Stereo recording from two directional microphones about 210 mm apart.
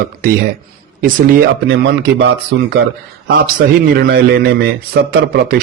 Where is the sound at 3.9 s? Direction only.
50° right (ahead or behind).